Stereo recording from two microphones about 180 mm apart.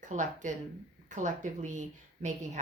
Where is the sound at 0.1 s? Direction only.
45° right (ahead or behind).